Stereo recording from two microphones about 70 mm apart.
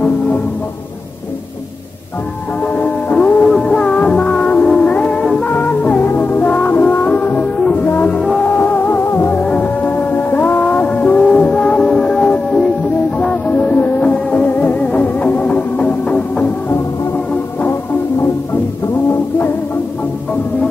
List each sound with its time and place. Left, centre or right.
2.6 s music: centre
3.4 s music: centre; by 8.1 s left
8.1 s music: centre
8.5 s music: left
9.4 s music: left
17.3 s music: left